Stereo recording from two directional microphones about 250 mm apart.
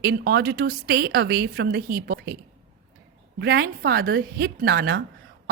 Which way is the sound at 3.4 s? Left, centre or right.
Right.